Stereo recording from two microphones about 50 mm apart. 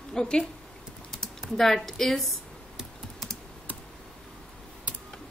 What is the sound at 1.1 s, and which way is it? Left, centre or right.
Speech, centre.